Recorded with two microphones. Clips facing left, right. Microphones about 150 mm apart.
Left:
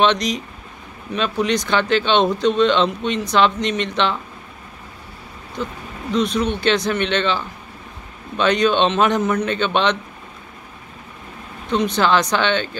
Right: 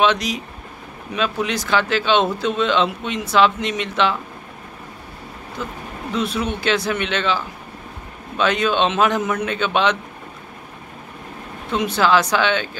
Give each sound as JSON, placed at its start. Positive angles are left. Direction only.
{"t": 0.0, "sound": "speech", "side_deg": -5}
{"t": 5.6, "sound": "a man's voice", "side_deg": -5}
{"t": 11.7, "sound": "a man's voice", "side_deg": -5}